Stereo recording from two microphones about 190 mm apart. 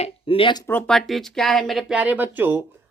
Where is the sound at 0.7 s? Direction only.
5° left (ahead or behind); by 2.7 s 10° right (ahead or behind).